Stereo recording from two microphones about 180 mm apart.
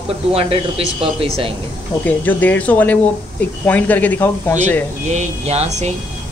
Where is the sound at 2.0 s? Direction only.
10° left (ahead or behind).